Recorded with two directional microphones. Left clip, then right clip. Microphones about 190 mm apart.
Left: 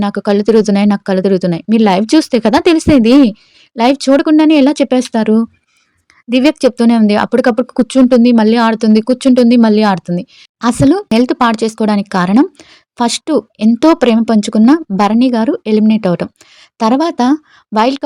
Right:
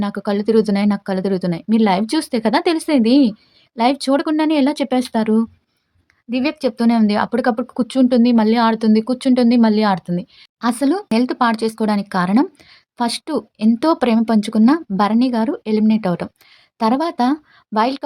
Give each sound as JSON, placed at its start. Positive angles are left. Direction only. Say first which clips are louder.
{"t": 0.0, "sound": "speech", "louder": "left 8 dB", "side_deg": 35}